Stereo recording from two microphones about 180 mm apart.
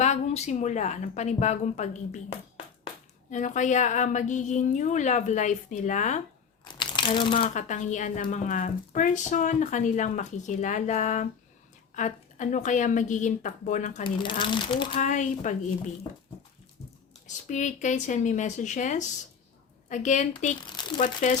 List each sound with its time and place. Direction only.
0.0 s a woman's voice: 40° left (ahead or behind)
3.2 s a woman's voice: 45° left (ahead or behind)
6.7 s crumpling: 25° left (ahead or behind)
7.5 s a woman's voice: 40° left (ahead or behind)
14.0 s speech: 25° left (ahead or behind)
14.9 s a woman's voice: 40° left (ahead or behind)
17.2 s a woman's voice: 40° left (ahead or behind)